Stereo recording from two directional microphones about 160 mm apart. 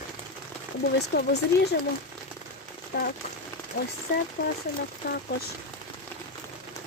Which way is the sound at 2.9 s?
80° left.